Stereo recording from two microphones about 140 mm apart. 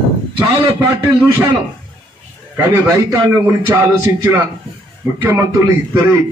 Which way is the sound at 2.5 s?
20° right (ahead or behind).